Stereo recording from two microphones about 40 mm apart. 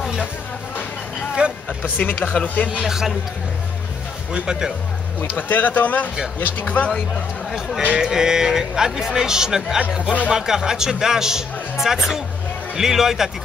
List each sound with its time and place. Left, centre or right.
1.4 s a sound: right
1.8 s speech: left
2.8 s speech: centre
4.3 s speech: centre
5.5 s speech: left
7.8 s speech: centre